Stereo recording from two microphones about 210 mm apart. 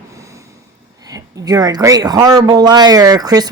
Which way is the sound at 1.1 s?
15° right (ahead or behind).